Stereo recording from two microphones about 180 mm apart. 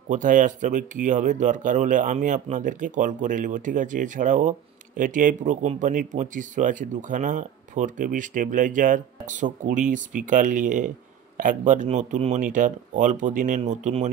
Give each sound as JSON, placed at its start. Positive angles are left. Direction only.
{"t": 0.1, "sound": "speech", "side_deg": -45}